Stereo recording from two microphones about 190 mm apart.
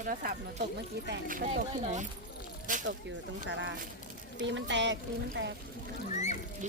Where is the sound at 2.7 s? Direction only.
45° right (ahead or behind).